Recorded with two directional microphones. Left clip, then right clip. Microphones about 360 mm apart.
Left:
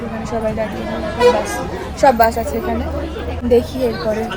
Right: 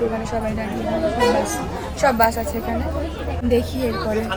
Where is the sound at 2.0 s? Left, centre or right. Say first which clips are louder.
Left 5 dB; centre.